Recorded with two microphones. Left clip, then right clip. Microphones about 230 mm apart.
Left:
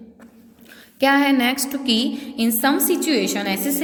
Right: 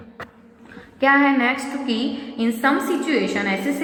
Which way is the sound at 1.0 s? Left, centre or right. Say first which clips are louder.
Right 1 dB; left.